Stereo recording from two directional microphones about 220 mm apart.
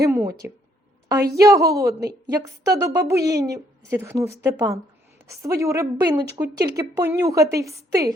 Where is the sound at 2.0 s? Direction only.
45° right (ahead or behind).